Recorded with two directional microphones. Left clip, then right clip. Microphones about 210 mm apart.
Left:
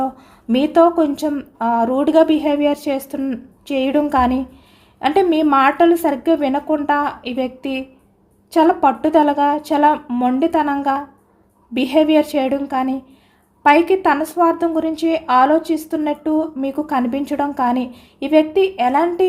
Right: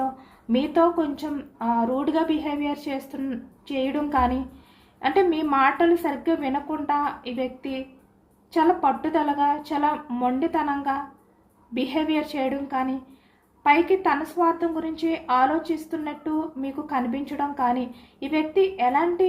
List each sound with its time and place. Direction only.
0.4 s a woman's voice: 55° left (ahead or behind)